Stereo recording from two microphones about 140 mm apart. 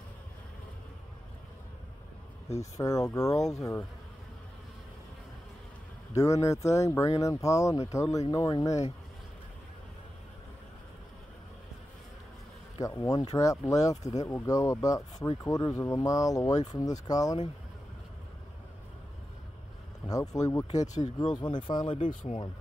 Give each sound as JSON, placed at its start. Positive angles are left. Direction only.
{"t": 2.6, "sound": "speech", "side_deg": 25}
{"t": 6.1, "sound": "speech", "side_deg": 20}
{"t": 12.8, "sound": "speech", "side_deg": 25}
{"t": 20.1, "sound": "speech", "side_deg": 25}
{"t": 20.8, "sound": "speech", "side_deg": 60}
{"t": 21.2, "sound": "speech", "side_deg": 35}
{"t": 21.9, "sound": "speech", "side_deg": 55}